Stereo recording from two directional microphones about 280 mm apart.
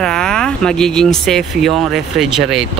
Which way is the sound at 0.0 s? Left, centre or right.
Centre.